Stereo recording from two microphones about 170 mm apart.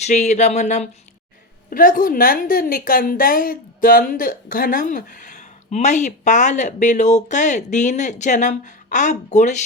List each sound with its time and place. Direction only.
0.0 s a woman's voice: 45° left (ahead or behind)
1.7 s a woman's voice: 55° left (ahead or behind)